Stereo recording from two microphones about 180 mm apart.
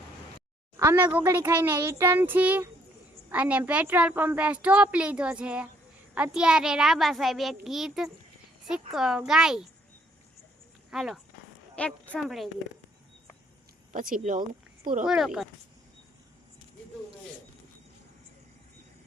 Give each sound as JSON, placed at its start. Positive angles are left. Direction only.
{"t": 0.8, "sound": "a woman's voice", "side_deg": -15}
{"t": 10.9, "sound": "a child's voice", "side_deg": 0}
{"t": 13.9, "sound": "speech", "side_deg": -50}
{"t": 15.0, "sound": "a child's voice", "side_deg": -5}